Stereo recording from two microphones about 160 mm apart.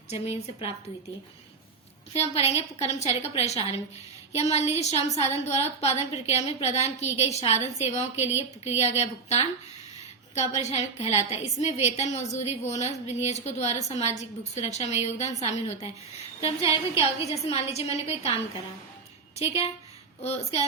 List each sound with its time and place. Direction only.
0.1 s a woman's voice: 40° left (ahead or behind)
2.1 s a woman's voice: 40° left (ahead or behind)
19.4 s a woman's voice: 40° left (ahead or behind)